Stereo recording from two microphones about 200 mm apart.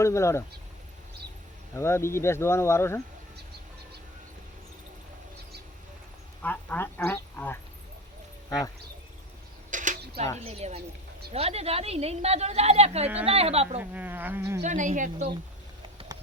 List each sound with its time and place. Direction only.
0.0 s speech: 15° left (ahead or behind)
1.7 s speech: 15° left (ahead or behind)
6.4 s speech: 10° left (ahead or behind)
9.6 s a sound: 40° right (ahead or behind)
10.3 s a woman's voice: 30° right (ahead or behind)
13.7 s speech: 10° right (ahead or behind)
14.6 s a woman's voice: 40° right (ahead or behind)